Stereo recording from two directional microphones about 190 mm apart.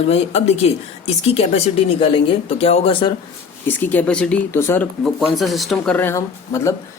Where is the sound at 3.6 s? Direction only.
10° left (ahead or behind).